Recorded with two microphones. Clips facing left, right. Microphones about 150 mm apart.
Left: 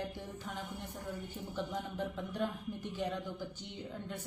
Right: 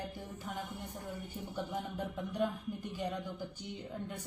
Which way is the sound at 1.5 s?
10° right (ahead or behind).